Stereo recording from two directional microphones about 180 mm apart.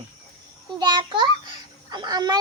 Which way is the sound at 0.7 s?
25° right (ahead or behind).